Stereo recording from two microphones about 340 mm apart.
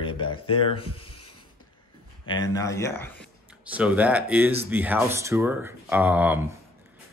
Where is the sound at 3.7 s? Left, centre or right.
Centre.